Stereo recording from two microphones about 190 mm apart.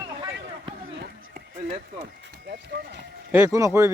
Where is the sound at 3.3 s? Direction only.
10° right (ahead or behind).